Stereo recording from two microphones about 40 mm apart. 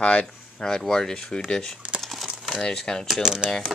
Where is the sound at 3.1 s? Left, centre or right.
Centre.